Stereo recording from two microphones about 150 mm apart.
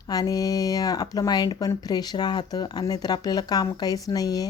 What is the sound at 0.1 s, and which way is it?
Speech, 25° left (ahead or behind).